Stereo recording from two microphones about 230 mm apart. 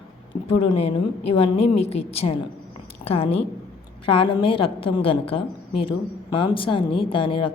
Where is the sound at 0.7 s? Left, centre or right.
Left.